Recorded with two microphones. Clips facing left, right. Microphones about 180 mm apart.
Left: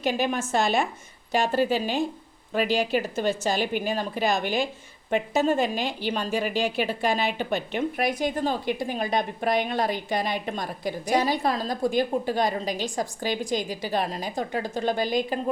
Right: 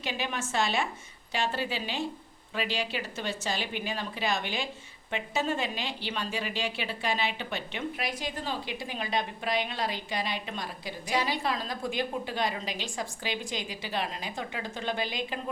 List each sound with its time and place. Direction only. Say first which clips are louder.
0.0 s speech: left 8 dB; 45° left (ahead or behind)